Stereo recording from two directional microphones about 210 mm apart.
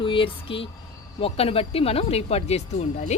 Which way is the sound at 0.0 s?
25° left (ahead or behind).